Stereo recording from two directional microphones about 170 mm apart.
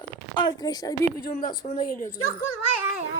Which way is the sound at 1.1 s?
60° left (ahead or behind).